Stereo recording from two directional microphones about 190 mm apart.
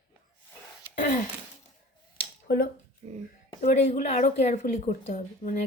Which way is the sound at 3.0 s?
35° right (ahead or behind).